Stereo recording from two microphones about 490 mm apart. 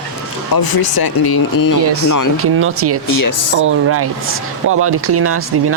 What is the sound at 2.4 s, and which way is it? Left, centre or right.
Speech, right.